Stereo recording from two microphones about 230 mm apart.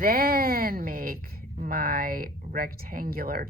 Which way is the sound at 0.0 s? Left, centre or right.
Right.